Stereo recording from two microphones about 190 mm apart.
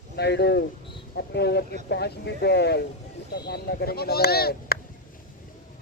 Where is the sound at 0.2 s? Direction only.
60° left (ahead or behind).